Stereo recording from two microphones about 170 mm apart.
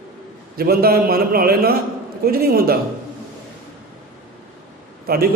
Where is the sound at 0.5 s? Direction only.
65° right (ahead or behind).